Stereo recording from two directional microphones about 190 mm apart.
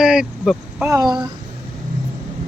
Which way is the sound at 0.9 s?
20° right (ahead or behind).